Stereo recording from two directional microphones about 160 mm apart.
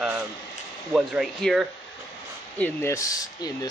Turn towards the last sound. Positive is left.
turn(degrees=25)  # may be behind; listen again after turning